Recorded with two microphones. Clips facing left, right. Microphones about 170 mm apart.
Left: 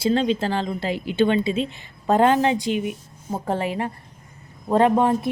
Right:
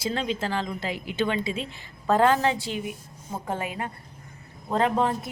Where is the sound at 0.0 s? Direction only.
30° left (ahead or behind).